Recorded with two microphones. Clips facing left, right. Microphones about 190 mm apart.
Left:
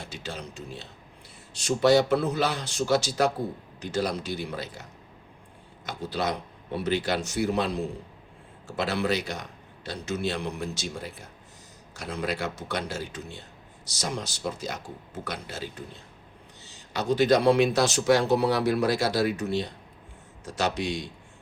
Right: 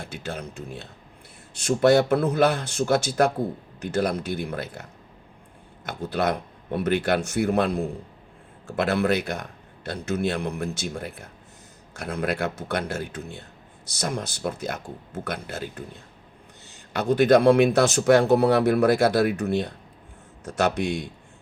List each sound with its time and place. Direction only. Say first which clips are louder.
0.0 s speech: right 4 dB; 55° right (ahead or behind)